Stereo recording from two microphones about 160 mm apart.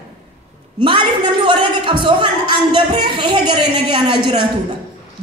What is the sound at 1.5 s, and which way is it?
Speech, 30° right (ahead or behind).